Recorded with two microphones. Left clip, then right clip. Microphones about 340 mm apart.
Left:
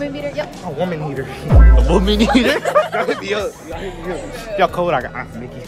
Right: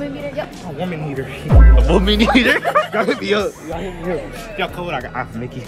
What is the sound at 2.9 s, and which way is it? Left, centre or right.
Speech, right.